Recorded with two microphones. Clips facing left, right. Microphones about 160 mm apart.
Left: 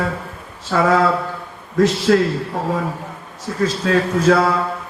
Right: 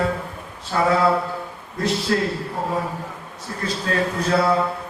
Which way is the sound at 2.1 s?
90° left.